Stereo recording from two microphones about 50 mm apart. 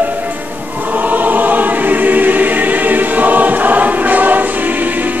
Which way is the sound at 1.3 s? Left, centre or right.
Right.